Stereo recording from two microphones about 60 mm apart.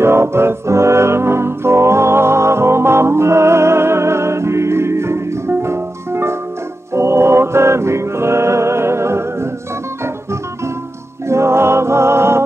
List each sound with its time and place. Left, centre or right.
0.0 s music: right
11.2 s music: right